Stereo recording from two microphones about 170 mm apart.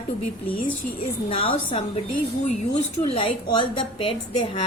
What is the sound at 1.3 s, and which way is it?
Speech, 35° left (ahead or behind).